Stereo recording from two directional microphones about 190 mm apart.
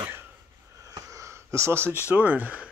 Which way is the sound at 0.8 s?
15° right (ahead or behind).